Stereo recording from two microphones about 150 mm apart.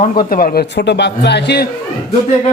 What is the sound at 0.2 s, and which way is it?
Speech, 70° left (ahead or behind).